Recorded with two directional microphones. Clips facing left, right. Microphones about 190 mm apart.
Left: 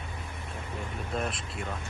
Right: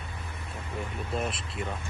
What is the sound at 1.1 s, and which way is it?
Speech, centre (ahead or behind).